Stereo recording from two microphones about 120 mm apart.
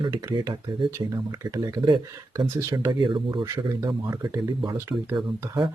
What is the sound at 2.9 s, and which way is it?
Speech, 40° right (ahead or behind).